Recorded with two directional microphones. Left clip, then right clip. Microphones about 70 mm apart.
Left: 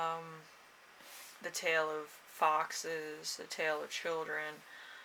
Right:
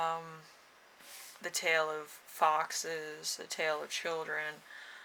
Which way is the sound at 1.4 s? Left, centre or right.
Right.